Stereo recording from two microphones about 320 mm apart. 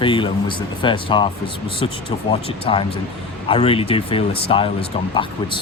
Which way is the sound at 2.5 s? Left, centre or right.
Centre.